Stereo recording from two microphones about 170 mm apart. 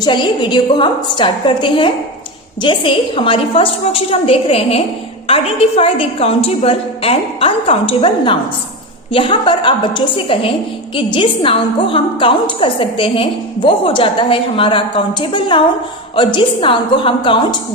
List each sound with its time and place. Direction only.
0.0 s a woman's voice: 25° left (ahead or behind)